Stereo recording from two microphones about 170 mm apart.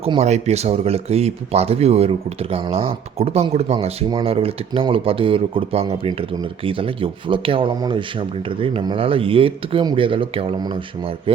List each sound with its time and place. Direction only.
0.0 s speech: 35° right (ahead or behind)